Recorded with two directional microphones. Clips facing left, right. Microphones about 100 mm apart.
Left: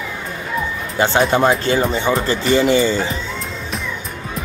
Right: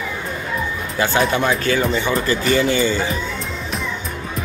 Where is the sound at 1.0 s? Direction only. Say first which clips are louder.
Left 3 dB; 30° left (ahead or behind).